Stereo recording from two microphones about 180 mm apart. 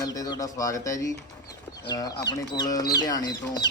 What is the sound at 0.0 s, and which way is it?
A man's voice, 20° left (ahead or behind).